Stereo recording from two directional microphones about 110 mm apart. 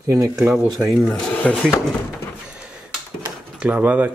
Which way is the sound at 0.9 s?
5° left (ahead or behind).